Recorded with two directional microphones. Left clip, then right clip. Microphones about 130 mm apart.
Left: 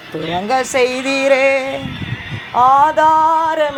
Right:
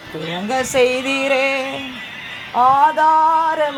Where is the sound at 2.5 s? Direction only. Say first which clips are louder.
Left 2 dB; 15° left (ahead or behind).